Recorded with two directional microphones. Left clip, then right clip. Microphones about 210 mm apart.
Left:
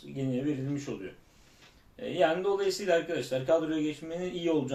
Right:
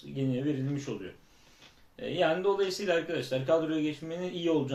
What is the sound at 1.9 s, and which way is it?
Speech, centre (ahead or behind).